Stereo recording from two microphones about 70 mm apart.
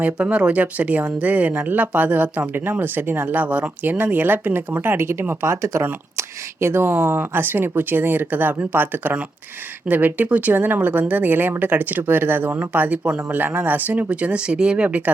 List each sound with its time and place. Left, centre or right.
0.0 s speech: centre